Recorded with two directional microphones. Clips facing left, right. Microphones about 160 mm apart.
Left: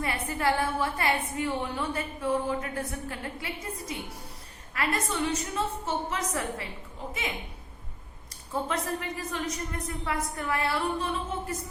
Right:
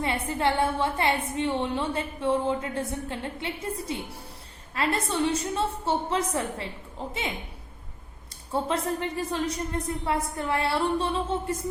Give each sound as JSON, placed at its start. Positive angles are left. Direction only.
{"t": 0.0, "sound": "a woman's voice", "side_deg": -25}
{"t": 8.6, "sound": "a woman's voice", "side_deg": -30}